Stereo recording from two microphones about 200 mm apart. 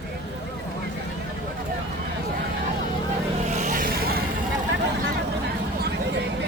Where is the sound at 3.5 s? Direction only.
40° right (ahead or behind).